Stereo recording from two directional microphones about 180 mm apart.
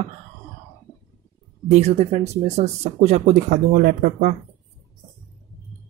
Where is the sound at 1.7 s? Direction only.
35° right (ahead or behind).